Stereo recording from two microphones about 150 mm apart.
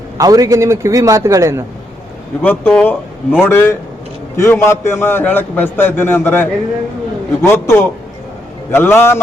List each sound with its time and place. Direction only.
0.2 s a man's voice: 25° right (ahead or behind)
2.4 s a man's voice: 10° left (ahead or behind)